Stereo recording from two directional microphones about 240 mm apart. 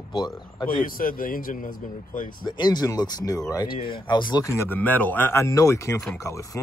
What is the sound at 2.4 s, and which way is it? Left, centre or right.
Speech, centre.